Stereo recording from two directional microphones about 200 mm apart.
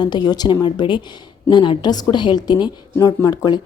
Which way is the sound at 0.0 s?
20° left (ahead or behind).